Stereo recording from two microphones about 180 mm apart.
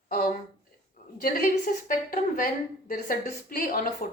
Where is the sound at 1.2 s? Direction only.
50° left (ahead or behind).